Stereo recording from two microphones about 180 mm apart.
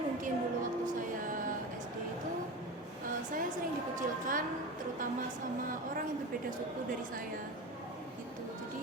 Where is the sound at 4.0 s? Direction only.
50° right (ahead or behind).